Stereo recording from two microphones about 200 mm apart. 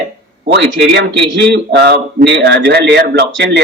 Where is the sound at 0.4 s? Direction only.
60° right (ahead or behind).